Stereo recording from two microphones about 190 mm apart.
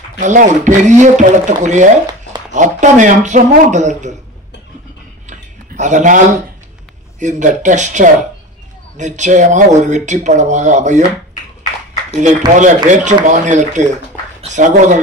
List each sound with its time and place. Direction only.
0.2 s speech: 40° right (ahead or behind)
5.2 s a sound: 40° right (ahead or behind)
7.2 s speech: 40° right (ahead or behind)
12.2 s speech: 40° right (ahead or behind)